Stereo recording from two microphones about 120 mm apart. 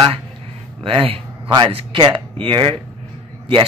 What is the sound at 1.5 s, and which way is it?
A man's voice, 35° right (ahead or behind).